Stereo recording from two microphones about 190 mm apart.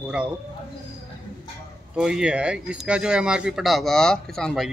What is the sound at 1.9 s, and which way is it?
Speech, 5° right (ahead or behind).